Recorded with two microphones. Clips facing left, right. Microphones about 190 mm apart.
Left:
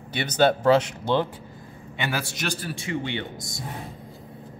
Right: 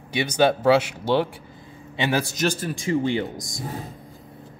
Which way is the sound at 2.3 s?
45° right (ahead or behind).